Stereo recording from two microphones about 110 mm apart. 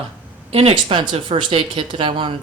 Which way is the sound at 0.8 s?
45° right (ahead or behind).